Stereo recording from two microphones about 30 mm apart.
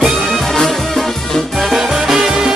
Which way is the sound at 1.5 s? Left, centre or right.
Centre.